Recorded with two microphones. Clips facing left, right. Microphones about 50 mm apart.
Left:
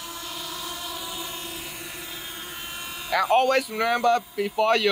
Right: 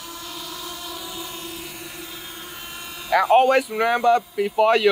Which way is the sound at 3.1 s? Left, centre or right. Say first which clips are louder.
Right 5 dB; centre.